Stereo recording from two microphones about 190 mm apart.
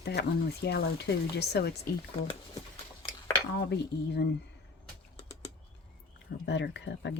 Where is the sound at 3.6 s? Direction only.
60° left (ahead or behind).